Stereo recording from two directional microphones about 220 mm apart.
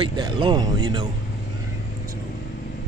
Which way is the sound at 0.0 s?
20° right (ahead or behind).